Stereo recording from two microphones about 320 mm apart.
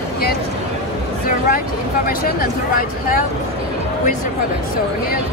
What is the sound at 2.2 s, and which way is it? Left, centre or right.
Speech, left.